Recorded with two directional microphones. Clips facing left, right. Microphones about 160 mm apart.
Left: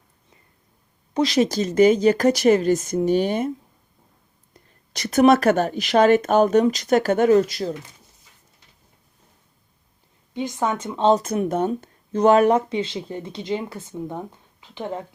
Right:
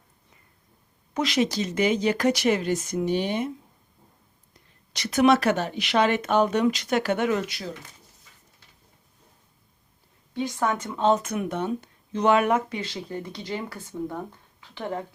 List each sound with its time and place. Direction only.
1.1 s speech: 35° left (ahead or behind)
4.9 s speech: 45° left (ahead or behind)
10.3 s speech: 20° left (ahead or behind)
14.6 s a sound: 20° left (ahead or behind)